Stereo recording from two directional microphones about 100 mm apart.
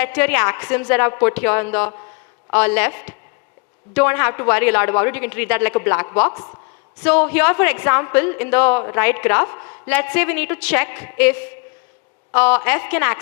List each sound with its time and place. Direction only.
0.0 s a woman's voice: 20° left (ahead or behind)